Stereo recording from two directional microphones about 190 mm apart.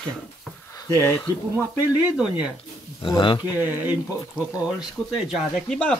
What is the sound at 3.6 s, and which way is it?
Speech, 10° right (ahead or behind).